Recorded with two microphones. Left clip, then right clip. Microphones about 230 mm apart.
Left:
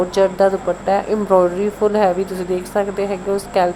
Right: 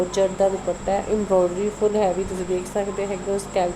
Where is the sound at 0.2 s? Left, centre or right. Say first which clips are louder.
Left 6 dB; centre.